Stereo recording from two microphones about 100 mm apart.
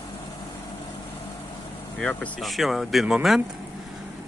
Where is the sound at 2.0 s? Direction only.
10° left (ahead or behind).